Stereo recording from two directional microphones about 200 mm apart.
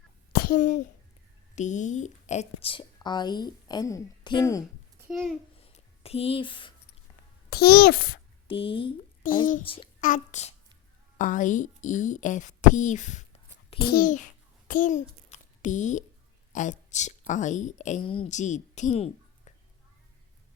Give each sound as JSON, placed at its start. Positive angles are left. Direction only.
{"t": 0.3, "sound": "a child's voice", "side_deg": 45}
{"t": 5.0, "sound": "a child's voice", "side_deg": -5}
{"t": 5.5, "sound": "a sound", "side_deg": 30}
{"t": 7.5, "sound": "a child's voice", "side_deg": 50}
{"t": 8.4, "sound": "a woman's voice", "side_deg": 25}
{"t": 9.2, "sound": "a child's voice", "side_deg": 40}
{"t": 9.6, "sound": "a woman's voice", "side_deg": 25}
{"t": 10.0, "sound": "a child's voice", "side_deg": 40}
{"t": 13.7, "sound": "a child's voice", "side_deg": 50}